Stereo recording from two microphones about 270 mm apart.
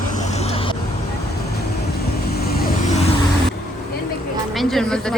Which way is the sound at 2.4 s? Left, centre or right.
Left.